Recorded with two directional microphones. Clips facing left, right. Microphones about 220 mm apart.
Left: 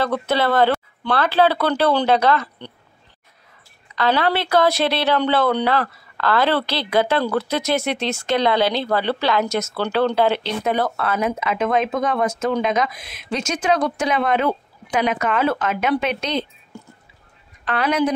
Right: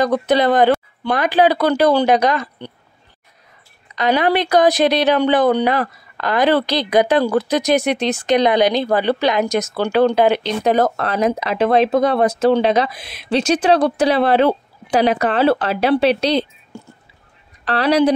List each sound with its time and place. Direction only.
0.0 s a woman's voice: 15° right (ahead or behind)
3.9 s a woman's voice: 20° right (ahead or behind)
10.6 s speech: 40° right (ahead or behind)